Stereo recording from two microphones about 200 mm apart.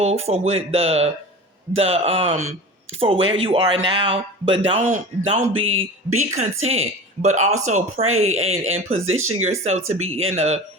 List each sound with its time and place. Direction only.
0.0 s speech: 30° right (ahead or behind)
5.7 s speech: 80° right
6.1 s speech: 35° right (ahead or behind)